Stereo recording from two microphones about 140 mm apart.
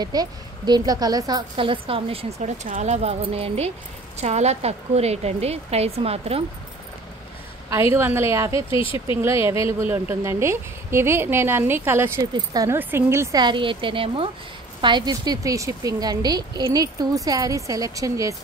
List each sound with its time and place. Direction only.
0.0 s a woman's voice: 30° right (ahead or behind); by 6.4 s 45° right (ahead or behind)
7.7 s a woman's voice: 20° right (ahead or behind)
8.6 s speech: 40° left (ahead or behind)
9.2 s a woman's voice: 20° right (ahead or behind)
13.4 s a woman's voice: 35° right (ahead or behind)